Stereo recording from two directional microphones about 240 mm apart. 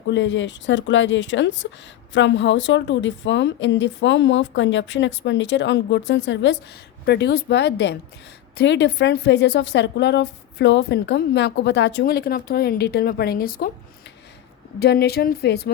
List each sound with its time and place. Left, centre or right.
0.1 s speech: left
14.8 s speech: left